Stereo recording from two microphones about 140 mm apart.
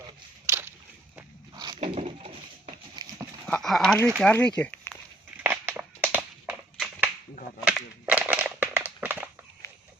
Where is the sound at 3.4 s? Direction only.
5° left (ahead or behind).